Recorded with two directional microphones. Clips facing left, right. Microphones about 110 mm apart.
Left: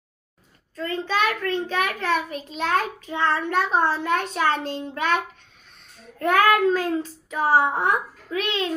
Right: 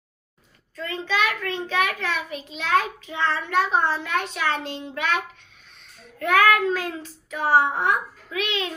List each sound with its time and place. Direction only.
0.7 s a child's voice: 40° left (ahead or behind)